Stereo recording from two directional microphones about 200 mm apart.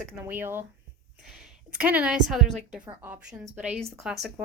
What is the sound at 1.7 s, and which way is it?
A woman's voice, 5° right (ahead or behind).